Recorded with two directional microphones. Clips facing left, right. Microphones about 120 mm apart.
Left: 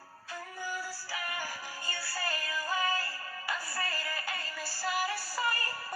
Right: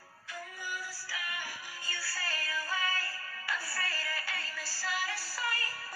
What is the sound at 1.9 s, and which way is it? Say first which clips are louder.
Music: left 2 dB; 20° left (ahead or behind).